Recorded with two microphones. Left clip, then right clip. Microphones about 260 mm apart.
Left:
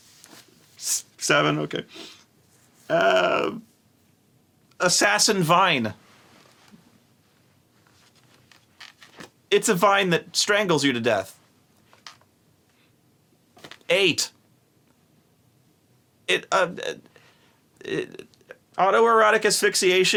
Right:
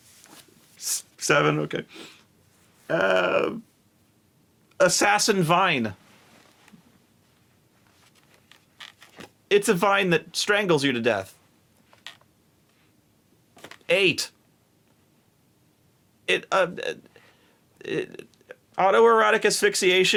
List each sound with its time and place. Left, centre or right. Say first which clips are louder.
0.8 s a sound: left 2 dB; right
2.8 s speech: left 2 dB; right
4.8 s speech: even; right
8.4 s a sound: right 1 dB; right
9.2 s speech: even; right
13.8 s speech: left 1 dB; right
16.2 s speech: left 1 dB; right